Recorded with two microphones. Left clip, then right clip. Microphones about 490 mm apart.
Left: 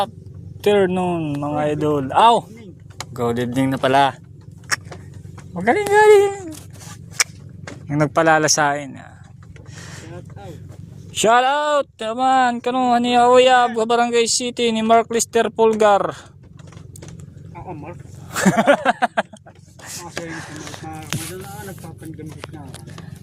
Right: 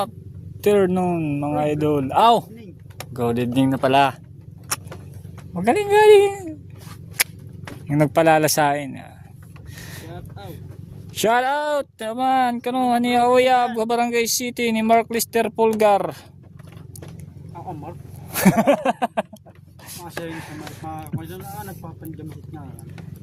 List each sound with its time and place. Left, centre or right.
0.6 s speech: right
5.5 s speech: right
7.9 s speech: right
11.2 s speech: right
17.5 s vehicle: right
18.3 s speech: right
19.8 s a sound: right
20.3 s speech: right